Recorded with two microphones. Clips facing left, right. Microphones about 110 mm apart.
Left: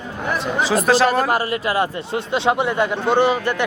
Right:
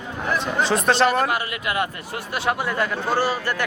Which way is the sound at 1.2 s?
35° left (ahead or behind).